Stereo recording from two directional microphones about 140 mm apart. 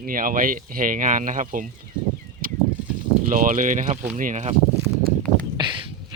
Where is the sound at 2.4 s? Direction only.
90° right.